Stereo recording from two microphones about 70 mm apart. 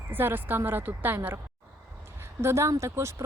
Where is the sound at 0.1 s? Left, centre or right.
Right.